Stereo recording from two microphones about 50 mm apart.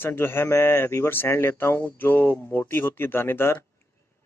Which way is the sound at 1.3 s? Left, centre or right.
Left.